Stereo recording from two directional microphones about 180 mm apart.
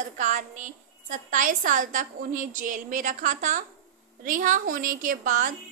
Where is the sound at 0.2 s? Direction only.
45° right (ahead or behind).